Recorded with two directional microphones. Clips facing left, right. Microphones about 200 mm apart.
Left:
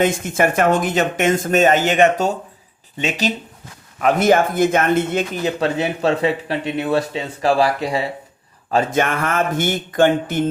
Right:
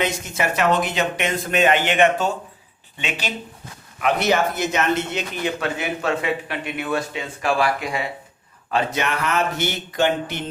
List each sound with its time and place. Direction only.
0.0 s speech: 50° left (ahead or behind); by 8.0 s 35° left (ahead or behind)
8.7 s speech: 50° left (ahead or behind)